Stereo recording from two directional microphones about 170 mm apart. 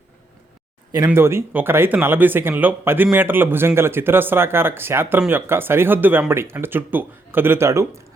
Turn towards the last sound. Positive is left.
turn(degrees=-15)  # may be behind; listen again after turning